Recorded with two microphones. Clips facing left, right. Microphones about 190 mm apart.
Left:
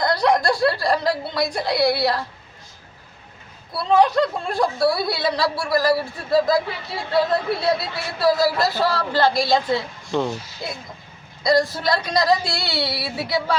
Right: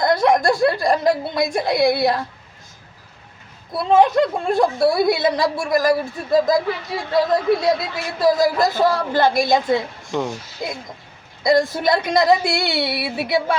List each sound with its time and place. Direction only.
0.0 s a woman's voice: 20° right (ahead or behind)
3.7 s a woman's voice: 20° right (ahead or behind)
11.7 s a woman's voice: 20° right (ahead or behind)